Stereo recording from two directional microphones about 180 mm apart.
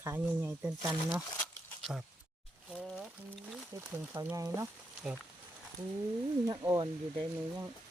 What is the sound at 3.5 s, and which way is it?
Speech, 10° right (ahead or behind).